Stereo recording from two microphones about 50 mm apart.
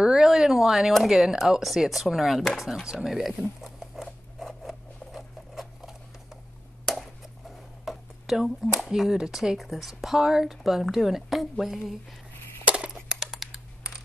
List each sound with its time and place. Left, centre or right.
0.0 s speech: centre
3.6 s zipper: centre
7.8 s a sound: centre
8.7 s speech: centre
12.6 s a sound: right
13.2 s computer keyboard: centre